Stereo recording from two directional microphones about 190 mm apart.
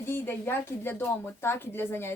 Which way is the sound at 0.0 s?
10° left (ahead or behind).